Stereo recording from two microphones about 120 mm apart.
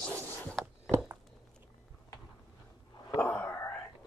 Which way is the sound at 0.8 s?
25° right (ahead or behind).